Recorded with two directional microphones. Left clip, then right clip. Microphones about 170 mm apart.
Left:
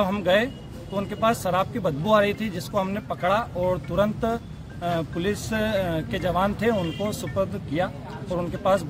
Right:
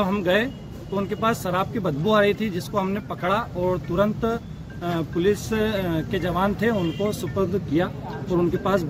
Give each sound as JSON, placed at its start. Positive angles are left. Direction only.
{"t": 0.0, "sound": "speech", "side_deg": 30}